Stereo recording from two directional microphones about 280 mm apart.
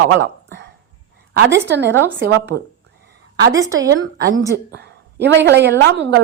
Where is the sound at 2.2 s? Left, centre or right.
Right.